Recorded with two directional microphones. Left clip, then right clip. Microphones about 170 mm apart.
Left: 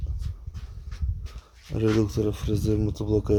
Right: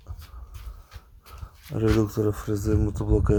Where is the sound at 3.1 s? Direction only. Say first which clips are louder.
Even; 20° left (ahead or behind).